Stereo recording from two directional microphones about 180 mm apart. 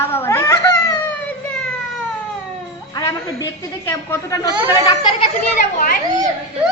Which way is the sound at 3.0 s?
20° left (ahead or behind).